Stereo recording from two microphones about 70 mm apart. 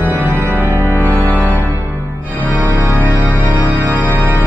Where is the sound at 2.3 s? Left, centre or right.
Right.